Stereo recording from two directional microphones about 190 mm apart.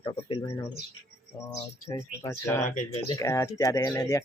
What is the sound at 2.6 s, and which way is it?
Speech, 40° left (ahead or behind).